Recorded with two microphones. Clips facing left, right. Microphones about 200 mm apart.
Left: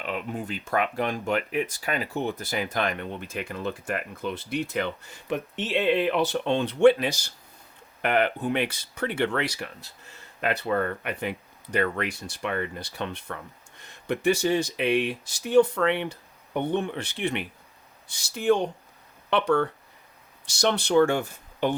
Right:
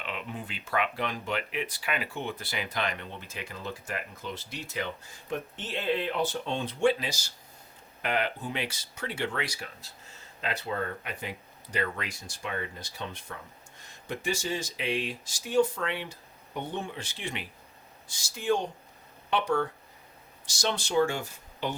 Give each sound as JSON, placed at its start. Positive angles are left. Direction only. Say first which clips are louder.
{"t": 0.0, "sound": "speech", "louder": "left 6 dB", "side_deg": 45}